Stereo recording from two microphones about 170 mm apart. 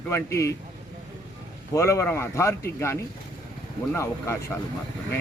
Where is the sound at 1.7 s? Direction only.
15° left (ahead or behind).